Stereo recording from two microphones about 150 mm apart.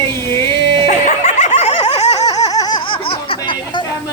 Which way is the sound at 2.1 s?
25° left (ahead or behind).